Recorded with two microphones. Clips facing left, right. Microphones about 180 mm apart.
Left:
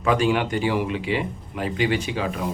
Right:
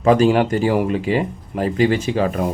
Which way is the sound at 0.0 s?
40° right (ahead or behind).